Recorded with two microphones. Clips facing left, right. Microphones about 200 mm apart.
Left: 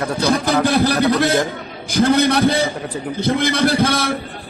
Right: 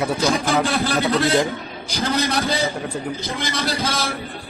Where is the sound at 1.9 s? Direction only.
60° left (ahead or behind).